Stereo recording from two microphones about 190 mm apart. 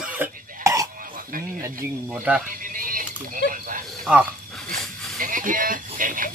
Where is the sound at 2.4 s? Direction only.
45° right (ahead or behind).